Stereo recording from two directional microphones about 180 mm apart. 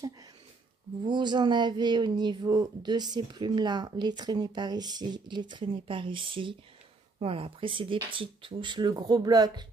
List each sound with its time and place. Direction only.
1.0 s speech: 25° right (ahead or behind)